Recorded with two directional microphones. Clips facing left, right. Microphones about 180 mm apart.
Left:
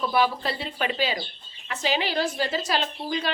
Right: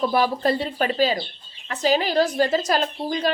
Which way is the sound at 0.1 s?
45° right (ahead or behind).